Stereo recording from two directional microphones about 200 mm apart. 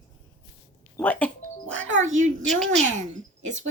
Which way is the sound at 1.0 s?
10° left (ahead or behind).